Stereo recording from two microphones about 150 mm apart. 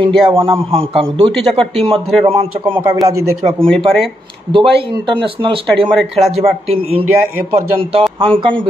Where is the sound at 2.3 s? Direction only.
35° right (ahead or behind).